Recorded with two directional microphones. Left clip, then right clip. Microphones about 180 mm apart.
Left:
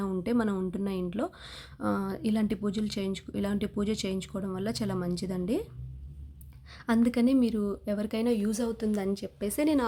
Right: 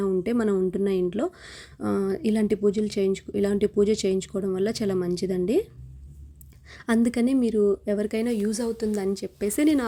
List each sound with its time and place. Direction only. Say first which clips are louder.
0.0 s speech: right 6 dB; 15° right (ahead or behind)
6.7 s speech: right 3 dB; 20° right (ahead or behind)